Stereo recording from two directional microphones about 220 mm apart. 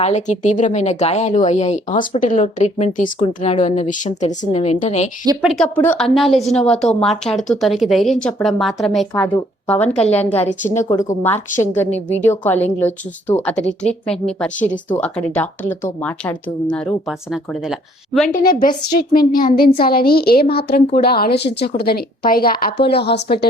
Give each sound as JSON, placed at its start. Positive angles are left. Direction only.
{"t": 0.0, "sound": "speech", "side_deg": 30}
{"t": 5.4, "sound": "speech", "side_deg": 0}
{"t": 10.4, "sound": "speech", "side_deg": 35}
{"t": 10.8, "sound": "speech", "side_deg": 15}
{"t": 18.3, "sound": "a woman's voice", "side_deg": 40}